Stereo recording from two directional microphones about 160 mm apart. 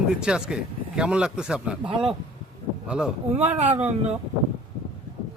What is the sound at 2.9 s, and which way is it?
Speech, 5° right (ahead or behind).